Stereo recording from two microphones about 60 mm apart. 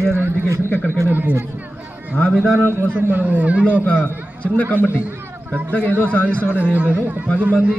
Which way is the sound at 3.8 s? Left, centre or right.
Left.